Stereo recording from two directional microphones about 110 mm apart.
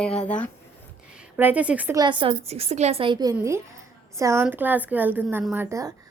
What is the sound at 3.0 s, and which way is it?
Speech, 40° right (ahead or behind).